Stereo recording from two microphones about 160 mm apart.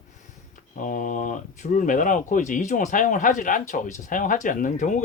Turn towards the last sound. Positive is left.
turn(degrees=50)  # may be behind; listen again after turning